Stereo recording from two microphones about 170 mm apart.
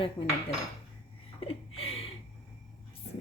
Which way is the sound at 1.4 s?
35° left (ahead or behind).